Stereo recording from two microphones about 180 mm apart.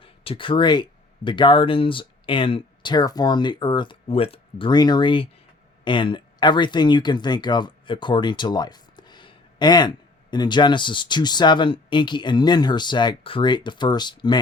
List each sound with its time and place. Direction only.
0.0 s speech: 30° left (ahead or behind)